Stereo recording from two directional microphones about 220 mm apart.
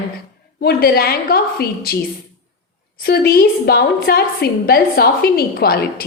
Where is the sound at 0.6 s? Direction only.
45° left (ahead or behind).